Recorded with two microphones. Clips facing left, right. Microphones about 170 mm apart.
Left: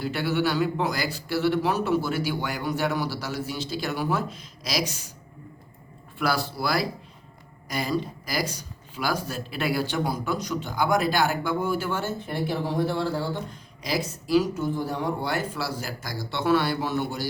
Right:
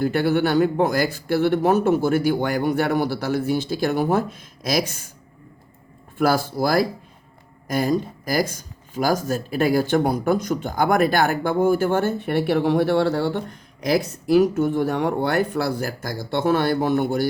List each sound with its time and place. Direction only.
0.0 s speech: 50° right (ahead or behind)
6.1 s speech: 45° right (ahead or behind)